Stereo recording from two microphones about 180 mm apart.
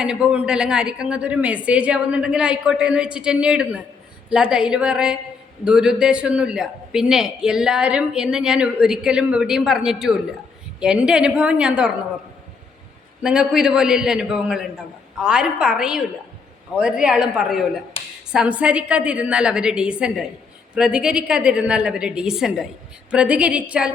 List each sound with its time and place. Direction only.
0.0 s a man's voice: 5° right (ahead or behind)
13.2 s a man's voice: 5° right (ahead or behind)
18.0 s speech: 30° left (ahead or behind)
18.3 s a man's voice: 5° right (ahead or behind)